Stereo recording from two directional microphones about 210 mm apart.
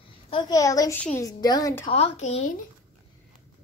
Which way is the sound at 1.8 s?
30° left (ahead or behind).